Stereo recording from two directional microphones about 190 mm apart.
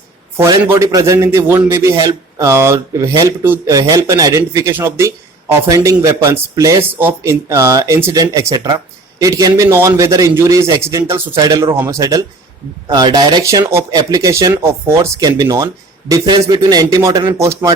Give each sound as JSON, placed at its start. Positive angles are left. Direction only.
{"t": 0.6, "sound": "a man's voice", "side_deg": -15}